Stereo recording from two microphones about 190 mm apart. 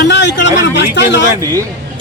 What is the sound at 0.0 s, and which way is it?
Speech, 65° left (ahead or behind).